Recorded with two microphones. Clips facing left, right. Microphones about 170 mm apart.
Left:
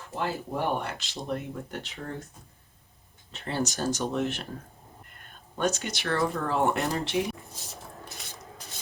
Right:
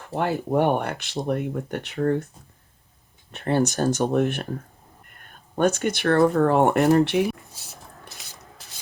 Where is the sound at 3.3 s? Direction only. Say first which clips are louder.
Right 9 dB; 55° right (ahead or behind).